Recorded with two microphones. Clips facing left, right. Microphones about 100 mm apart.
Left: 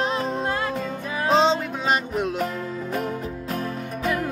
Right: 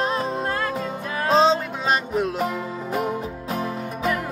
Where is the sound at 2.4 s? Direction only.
10° right (ahead or behind).